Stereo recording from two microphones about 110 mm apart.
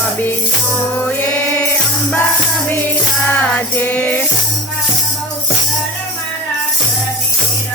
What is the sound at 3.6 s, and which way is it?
Music, 15° left (ahead or behind).